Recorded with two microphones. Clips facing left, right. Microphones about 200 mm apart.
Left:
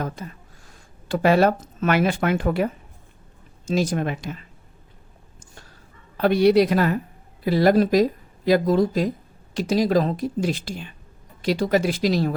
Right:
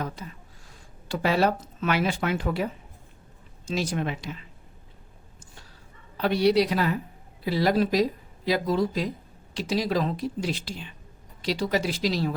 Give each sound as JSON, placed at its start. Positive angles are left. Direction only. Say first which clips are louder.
{"t": 0.0, "sound": "speech", "louder": "left 4 dB", "side_deg": 50}
{"t": 3.7, "sound": "speech", "louder": "left 5 dB", "side_deg": 45}
{"t": 6.1, "sound": "speech", "louder": "left 5 dB", "side_deg": 50}